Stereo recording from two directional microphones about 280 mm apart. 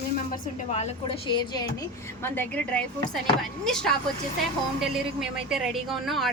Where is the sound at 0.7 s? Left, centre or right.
Left.